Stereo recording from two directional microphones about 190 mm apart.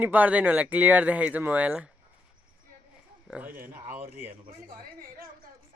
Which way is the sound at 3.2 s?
10° right (ahead or behind).